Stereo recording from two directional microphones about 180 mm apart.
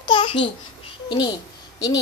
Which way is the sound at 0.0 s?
30° left (ahead or behind).